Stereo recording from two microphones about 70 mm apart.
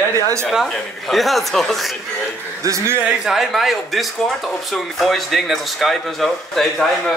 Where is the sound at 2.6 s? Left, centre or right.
Right.